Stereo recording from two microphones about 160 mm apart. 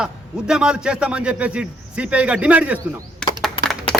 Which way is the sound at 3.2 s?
5° left (ahead or behind).